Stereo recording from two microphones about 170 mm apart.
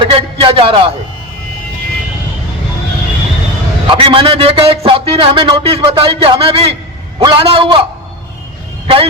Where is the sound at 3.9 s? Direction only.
30° right (ahead or behind).